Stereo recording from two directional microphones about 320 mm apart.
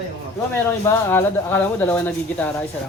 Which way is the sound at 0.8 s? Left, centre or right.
Centre.